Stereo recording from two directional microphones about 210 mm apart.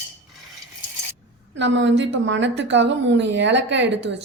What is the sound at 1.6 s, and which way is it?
A woman's voice, 60° right (ahead or behind).